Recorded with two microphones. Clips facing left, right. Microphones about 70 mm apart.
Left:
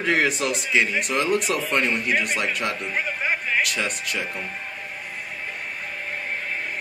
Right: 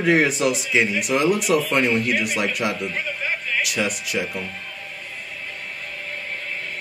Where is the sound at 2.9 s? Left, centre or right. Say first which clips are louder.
Left 1 dB; centre.